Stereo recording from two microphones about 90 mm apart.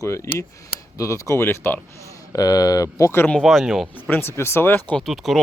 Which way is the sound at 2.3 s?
45° left (ahead or behind).